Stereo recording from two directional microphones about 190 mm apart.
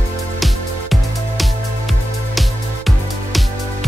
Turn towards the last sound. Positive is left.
turn(degrees=0)  # may be behind; listen again after turning